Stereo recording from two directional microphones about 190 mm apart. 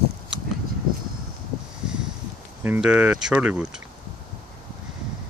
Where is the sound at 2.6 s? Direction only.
10° right (ahead or behind).